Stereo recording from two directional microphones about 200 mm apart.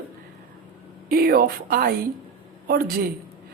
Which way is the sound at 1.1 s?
50° right (ahead or behind).